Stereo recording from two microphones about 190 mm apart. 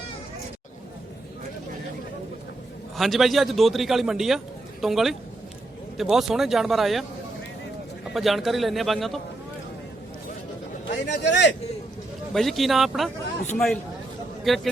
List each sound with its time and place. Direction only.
3.0 s a man's voice: centre (ahead or behind)
8.1 s a man's voice: centre (ahead or behind)
10.8 s speech: 65° left (ahead or behind)
12.3 s a man's voice: centre (ahead or behind)
14.4 s a man's voice: centre (ahead or behind)